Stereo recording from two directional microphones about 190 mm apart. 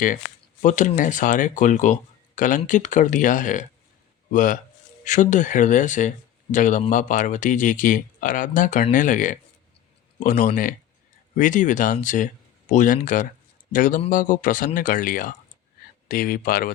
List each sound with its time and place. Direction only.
0.6 s a man's voice: 40° left (ahead or behind)